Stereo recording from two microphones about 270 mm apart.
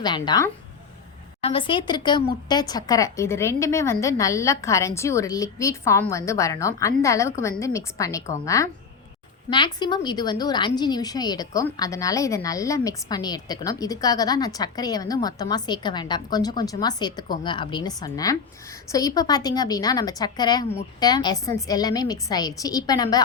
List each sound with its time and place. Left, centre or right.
0.0 s a woman's voice: centre